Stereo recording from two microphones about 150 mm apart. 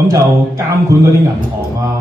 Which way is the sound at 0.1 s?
20° right (ahead or behind).